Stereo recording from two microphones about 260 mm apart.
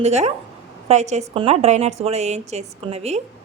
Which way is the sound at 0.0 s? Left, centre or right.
Right.